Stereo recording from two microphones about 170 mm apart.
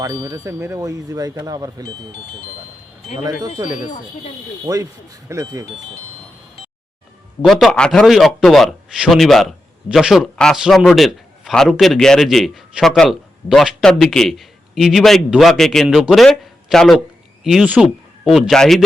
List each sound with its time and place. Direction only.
0.0 s speech: 20° right (ahead or behind)
4.6 s speech: 20° right (ahead or behind)
6.6 s music: 30° left (ahead or behind)
7.4 s a man's voice: 5° left (ahead or behind)